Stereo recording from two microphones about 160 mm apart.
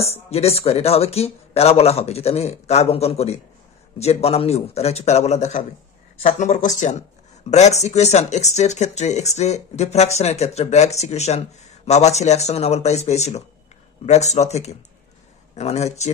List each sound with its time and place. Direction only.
0.0 s speech: 40° left (ahead or behind)